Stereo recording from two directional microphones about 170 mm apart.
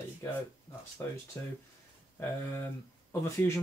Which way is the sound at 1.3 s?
20° left (ahead or behind).